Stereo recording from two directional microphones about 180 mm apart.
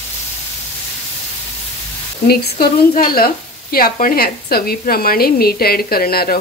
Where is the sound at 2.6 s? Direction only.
55° left (ahead or behind).